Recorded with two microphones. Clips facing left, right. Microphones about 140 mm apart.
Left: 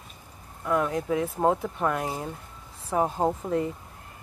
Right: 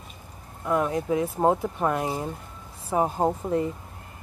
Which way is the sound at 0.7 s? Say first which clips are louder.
Right 1 dB; 10° right (ahead or behind).